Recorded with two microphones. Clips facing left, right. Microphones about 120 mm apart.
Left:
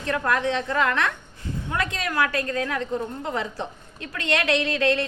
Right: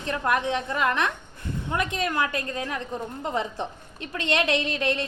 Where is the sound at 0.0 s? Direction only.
20° right (ahead or behind).